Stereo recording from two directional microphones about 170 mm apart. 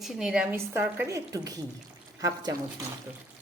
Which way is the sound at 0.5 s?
15° right (ahead or behind).